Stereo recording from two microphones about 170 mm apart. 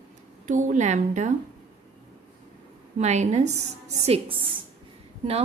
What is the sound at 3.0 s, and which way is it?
A woman's voice, 40° right (ahead or behind).